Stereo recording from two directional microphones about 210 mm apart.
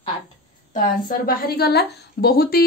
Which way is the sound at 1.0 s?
45° left (ahead or behind).